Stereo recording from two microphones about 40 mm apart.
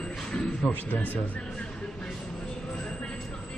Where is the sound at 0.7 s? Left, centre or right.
Left.